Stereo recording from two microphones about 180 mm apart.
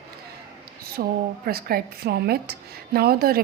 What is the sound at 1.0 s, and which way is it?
A woman's voice, 55° right (ahead or behind).